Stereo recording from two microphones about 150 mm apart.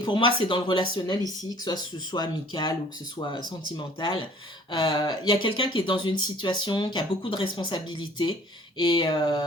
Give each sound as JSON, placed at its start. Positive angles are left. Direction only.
{"t": 0.0, "sound": "speech", "side_deg": 30}
{"t": 4.0, "sound": "speech", "side_deg": 30}